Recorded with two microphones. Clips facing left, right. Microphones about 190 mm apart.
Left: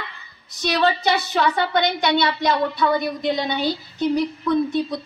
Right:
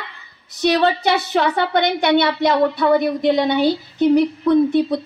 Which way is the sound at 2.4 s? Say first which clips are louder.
Right 4 dB; 55° right (ahead or behind).